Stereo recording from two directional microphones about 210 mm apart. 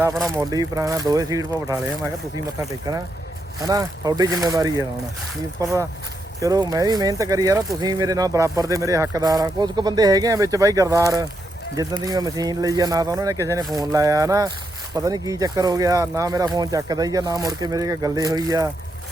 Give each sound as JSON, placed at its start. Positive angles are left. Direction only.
{"t": 0.3, "sound": "speech", "side_deg": -15}